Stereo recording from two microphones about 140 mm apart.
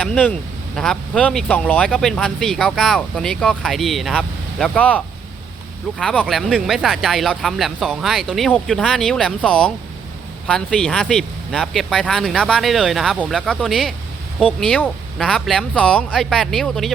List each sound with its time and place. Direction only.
0.0 s speech: 5° left (ahead or behind)